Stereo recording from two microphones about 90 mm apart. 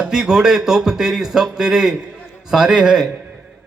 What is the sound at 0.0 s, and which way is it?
A man's voice, 10° right (ahead or behind).